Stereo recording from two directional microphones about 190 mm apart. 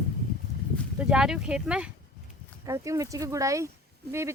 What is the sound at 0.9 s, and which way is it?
Speech, 5° right (ahead or behind).